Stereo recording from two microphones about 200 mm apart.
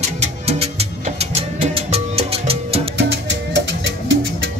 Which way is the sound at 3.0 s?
60° right (ahead or behind).